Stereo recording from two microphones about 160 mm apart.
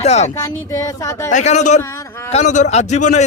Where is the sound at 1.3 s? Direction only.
50° left (ahead or behind).